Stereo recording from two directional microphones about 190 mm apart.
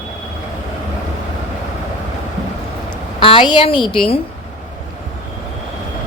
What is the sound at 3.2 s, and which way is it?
Speech, 25° left (ahead or behind).